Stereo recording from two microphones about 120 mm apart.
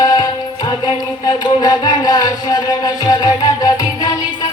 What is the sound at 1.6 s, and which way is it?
Music, 35° left (ahead or behind).